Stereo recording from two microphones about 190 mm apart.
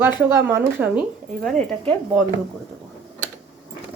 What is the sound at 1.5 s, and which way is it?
Speech, 5° left (ahead or behind).